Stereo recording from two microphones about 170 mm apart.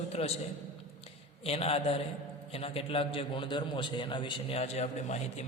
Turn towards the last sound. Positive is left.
turn(degrees=40)  # may be behind; listen again after turning